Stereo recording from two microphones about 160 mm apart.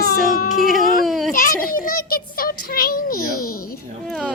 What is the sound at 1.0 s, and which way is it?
Children playing, centre (ahead or behind).